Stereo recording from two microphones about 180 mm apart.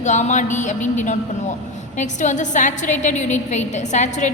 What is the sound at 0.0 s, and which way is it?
A woman's voice, 40° left (ahead or behind).